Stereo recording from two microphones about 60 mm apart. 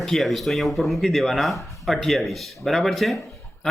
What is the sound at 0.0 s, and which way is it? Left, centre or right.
Speech, centre.